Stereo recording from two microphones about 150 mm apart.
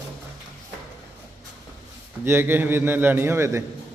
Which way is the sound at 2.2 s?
15° right (ahead or behind).